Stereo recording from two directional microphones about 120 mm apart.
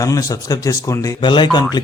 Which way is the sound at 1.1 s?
40° left (ahead or behind).